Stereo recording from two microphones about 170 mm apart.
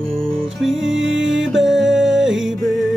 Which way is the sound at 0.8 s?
90° right.